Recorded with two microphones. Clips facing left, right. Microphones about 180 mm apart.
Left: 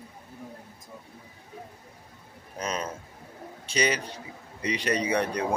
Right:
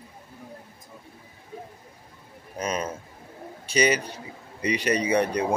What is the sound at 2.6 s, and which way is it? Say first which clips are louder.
A man's voice: right 3 dB; 5° right (ahead or behind).